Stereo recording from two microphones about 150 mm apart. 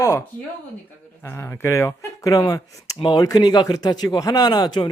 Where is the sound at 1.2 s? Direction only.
20° left (ahead or behind).